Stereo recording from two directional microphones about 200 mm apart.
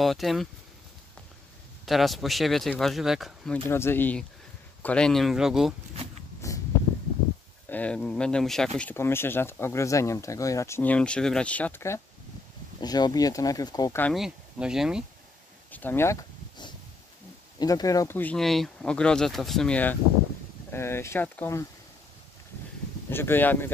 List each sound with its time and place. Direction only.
0.0 s speech: centre (ahead or behind)
1.9 s speech: centre (ahead or behind)
6.4 s a sound: 15° left (ahead or behind)
7.6 s speech: 5° left (ahead or behind)
14.0 s speech: centre (ahead or behind)
15.7 s a sound: 10° left (ahead or behind)
17.6 s speech: 20° left (ahead or behind)
23.0 s speech: 10° left (ahead or behind)